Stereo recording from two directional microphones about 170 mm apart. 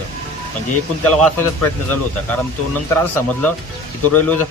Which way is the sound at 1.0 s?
10° left (ahead or behind).